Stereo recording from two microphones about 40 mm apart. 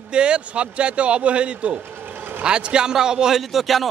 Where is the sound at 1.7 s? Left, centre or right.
Right.